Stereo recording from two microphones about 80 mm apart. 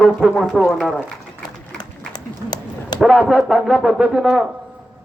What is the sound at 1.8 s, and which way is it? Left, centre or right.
Run, left.